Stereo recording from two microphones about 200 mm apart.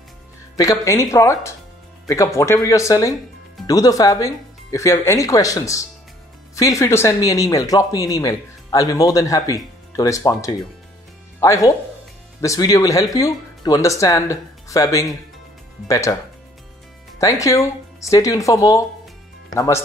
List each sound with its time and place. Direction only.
0.6 s speech: 15° left (ahead or behind)
17.2 s speech: 15° left (ahead or behind)